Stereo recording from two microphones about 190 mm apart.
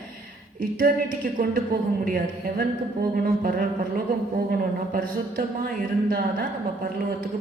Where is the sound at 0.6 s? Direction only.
50° right (ahead or behind).